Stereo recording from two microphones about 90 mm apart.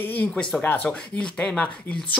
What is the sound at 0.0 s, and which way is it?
Speech, 15° left (ahead or behind).